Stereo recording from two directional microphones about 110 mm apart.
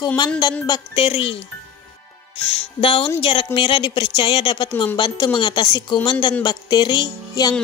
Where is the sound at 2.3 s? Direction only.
65° left (ahead or behind).